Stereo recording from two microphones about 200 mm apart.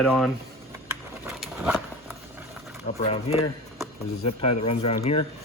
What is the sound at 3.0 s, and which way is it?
Speech, 30° left (ahead or behind).